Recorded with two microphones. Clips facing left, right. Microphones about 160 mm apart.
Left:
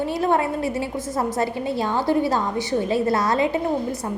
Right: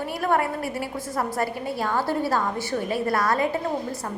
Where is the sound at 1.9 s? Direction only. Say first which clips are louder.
Left 3 dB; 20° left (ahead or behind).